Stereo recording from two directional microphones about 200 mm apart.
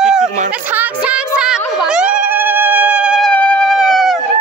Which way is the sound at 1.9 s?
5° right (ahead or behind).